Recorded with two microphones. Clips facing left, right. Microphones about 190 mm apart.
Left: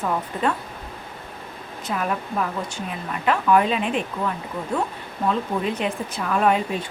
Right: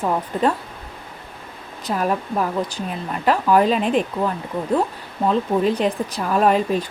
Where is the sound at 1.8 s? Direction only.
35° right (ahead or behind).